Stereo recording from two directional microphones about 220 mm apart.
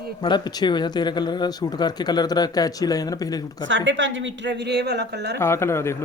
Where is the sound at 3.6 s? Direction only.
60° right (ahead or behind).